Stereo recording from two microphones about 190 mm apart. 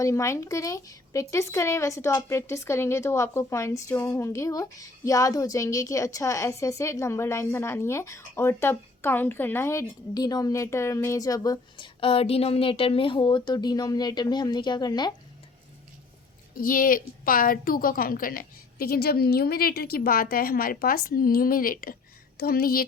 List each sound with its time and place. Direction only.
0.0 s speech: 15° left (ahead or behind)
16.6 s a woman's voice: 50° left (ahead or behind)